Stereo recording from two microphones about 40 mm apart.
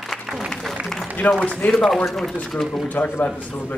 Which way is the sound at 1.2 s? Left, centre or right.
Left.